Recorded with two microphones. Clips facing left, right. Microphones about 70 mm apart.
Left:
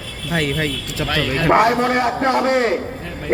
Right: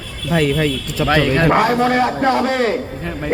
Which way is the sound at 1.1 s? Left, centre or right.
Right.